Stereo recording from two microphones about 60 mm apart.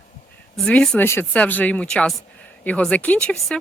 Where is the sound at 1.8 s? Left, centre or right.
Centre.